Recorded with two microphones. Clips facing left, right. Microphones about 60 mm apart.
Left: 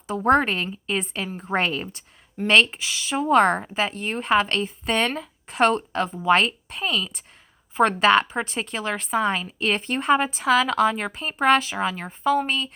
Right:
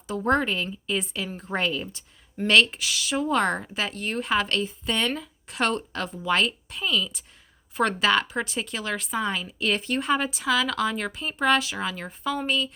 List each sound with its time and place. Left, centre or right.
0.1 s a woman's voice: left
5.1 s a woman's voice: left
7.9 s a woman's voice: left